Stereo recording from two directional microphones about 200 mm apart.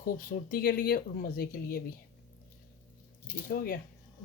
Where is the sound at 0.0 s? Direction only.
45° left (ahead or behind).